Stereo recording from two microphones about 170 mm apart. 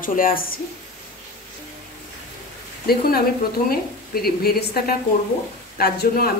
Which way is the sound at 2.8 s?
65° left (ahead or behind).